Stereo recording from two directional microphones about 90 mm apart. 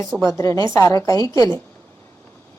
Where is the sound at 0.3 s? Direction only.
35° left (ahead or behind).